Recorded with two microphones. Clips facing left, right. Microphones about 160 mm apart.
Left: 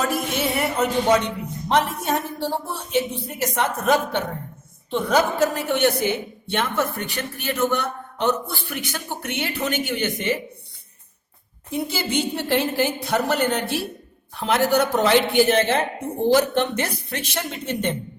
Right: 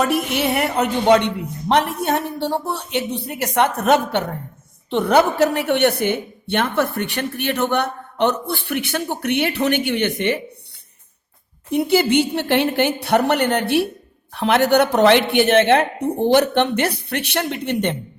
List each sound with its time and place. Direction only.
0.1 s a woman's voice: 65° right (ahead or behind)
11.7 s a woman's voice: 65° right (ahead or behind)